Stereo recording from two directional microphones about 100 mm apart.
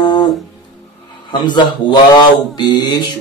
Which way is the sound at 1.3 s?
50° left (ahead or behind).